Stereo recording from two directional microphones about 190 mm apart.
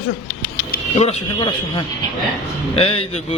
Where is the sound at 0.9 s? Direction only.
35° left (ahead or behind).